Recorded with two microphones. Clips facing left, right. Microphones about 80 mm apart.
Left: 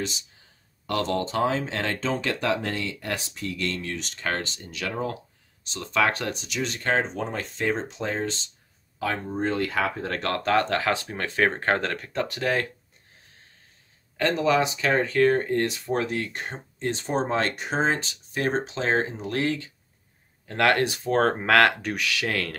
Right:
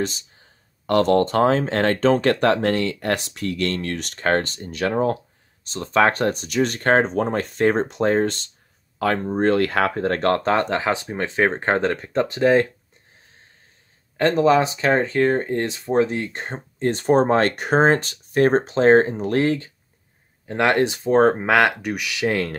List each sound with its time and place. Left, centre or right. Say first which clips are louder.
0.8 s speech: right 9 dB; right
14.1 s speech: right 6 dB; right
20.4 s speech: right 3 dB; right